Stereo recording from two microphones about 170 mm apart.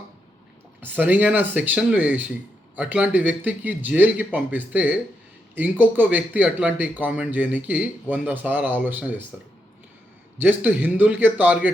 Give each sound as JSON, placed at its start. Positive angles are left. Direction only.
{"t": 0.8, "sound": "speech", "side_deg": -10}
{"t": 10.3, "sound": "speech", "side_deg": -10}